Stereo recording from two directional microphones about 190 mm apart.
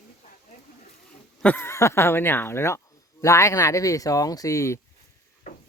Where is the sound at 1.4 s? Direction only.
10° left (ahead or behind).